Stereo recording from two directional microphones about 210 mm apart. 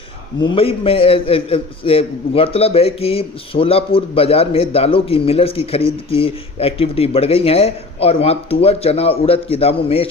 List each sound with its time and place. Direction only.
0.3 s a man's voice: 25° left (ahead or behind)